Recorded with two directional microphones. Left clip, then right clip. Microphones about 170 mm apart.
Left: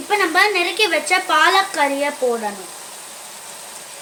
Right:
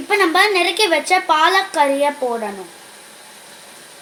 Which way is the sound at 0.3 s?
30° right (ahead or behind).